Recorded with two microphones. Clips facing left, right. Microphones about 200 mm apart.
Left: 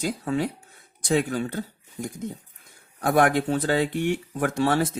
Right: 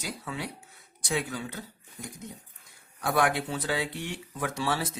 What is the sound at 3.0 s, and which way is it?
Speech, 50° left (ahead or behind).